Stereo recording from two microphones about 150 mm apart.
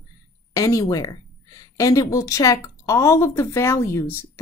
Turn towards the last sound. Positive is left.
turn(degrees=15)  # may be behind; listen again after turning